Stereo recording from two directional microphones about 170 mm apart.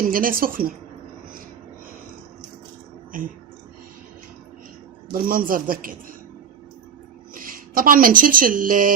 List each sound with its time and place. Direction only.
0.1 s speech: 55° right (ahead or behind)
3.1 s speech: 50° right (ahead or behind)
5.1 s speech: 55° right (ahead or behind)
7.3 s speech: 55° right (ahead or behind)